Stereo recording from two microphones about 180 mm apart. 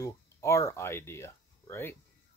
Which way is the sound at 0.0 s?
15° left (ahead or behind).